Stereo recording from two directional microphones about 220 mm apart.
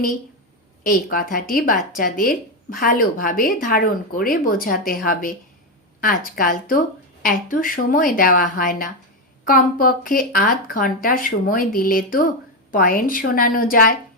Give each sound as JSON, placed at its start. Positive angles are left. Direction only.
{"t": 0.9, "sound": "a woman's voice", "side_deg": 40}
{"t": 6.0, "sound": "a woman's voice", "side_deg": 40}